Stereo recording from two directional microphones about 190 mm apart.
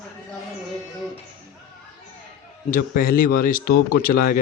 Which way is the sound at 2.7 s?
50° left (ahead or behind).